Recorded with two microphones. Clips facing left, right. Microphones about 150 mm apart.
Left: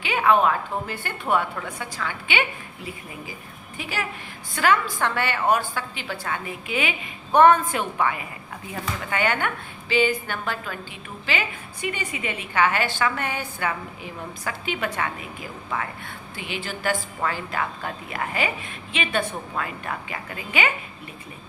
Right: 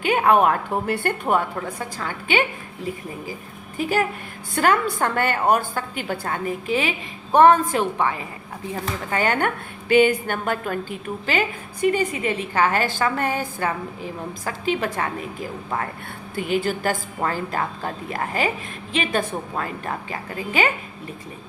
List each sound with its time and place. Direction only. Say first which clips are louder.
0.0 s a woman's voice: right 3 dB; 50° right (ahead or behind)
1.3 s a woman's voice: left 1 dB; 40° right (ahead or behind)
3.8 s a woman's voice: right 9 dB; 45° right (ahead or behind)
9.9 s a woman's voice: right 6 dB; 50° right (ahead or behind)